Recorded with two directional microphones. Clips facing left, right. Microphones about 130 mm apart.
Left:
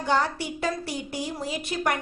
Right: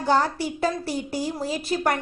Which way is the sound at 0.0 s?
35° right (ahead or behind).